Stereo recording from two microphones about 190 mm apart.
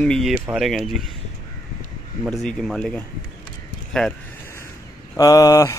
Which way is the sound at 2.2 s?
Centre (ahead or behind).